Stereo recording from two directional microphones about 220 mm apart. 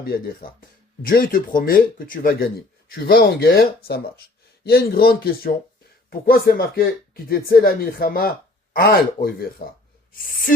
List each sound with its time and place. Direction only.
1.0 s speech: 40° left (ahead or behind)